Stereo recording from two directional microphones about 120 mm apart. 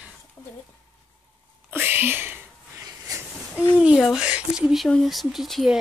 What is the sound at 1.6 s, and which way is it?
Whispering, 15° right (ahead or behind).